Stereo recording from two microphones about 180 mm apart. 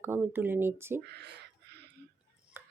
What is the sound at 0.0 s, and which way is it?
Speech, 10° right (ahead or behind).